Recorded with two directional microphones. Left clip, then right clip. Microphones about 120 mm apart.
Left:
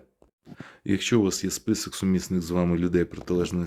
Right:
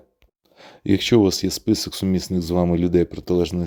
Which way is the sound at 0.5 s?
45° right (ahead or behind).